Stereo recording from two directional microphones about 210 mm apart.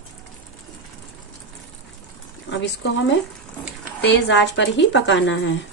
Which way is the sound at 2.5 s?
60° left (ahead or behind).